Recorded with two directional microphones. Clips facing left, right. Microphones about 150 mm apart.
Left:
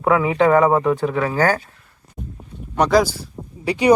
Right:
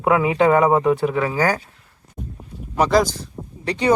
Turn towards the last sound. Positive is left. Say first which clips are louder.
# left 3 dB
turn(degrees=10)  # may be behind; listen again after turning